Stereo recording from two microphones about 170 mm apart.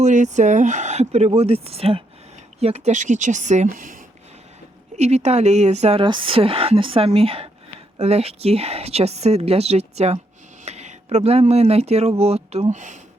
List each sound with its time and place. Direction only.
0.0 s a woman's voice: 45° right (ahead or behind)
4.9 s a woman's voice: 40° right (ahead or behind)